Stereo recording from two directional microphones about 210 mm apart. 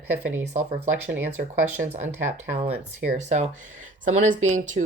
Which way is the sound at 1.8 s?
35° right (ahead or behind).